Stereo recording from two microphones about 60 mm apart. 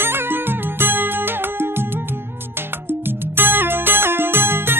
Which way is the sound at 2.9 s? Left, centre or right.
Right.